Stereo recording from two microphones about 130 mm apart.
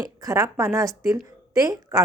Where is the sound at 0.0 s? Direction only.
25° right (ahead or behind).